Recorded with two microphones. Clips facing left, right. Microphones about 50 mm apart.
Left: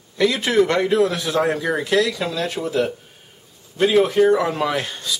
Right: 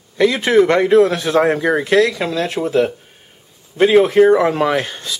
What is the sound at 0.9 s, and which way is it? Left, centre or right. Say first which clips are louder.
Speech: right 6 dB; right.